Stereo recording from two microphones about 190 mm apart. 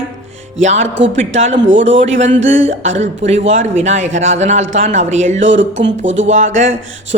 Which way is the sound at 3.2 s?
35° right (ahead or behind).